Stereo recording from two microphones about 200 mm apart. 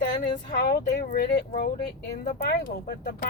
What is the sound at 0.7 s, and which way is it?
Speech, 50° left (ahead or behind).